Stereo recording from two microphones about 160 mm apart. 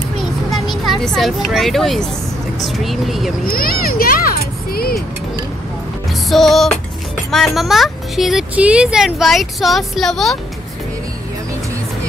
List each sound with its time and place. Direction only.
0.5 s speech: centre (ahead or behind)
3.4 s a child's voice: 65° left (ahead or behind)
6.2 s speech: centre (ahead or behind)